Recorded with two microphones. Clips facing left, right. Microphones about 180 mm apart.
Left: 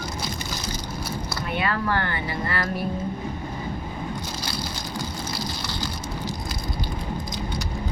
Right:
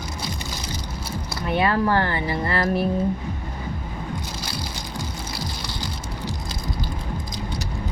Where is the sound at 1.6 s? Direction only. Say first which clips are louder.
Right 5 dB; 30° right (ahead or behind).